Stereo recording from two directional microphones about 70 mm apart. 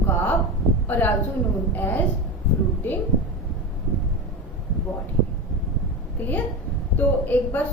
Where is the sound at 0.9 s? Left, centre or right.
Left.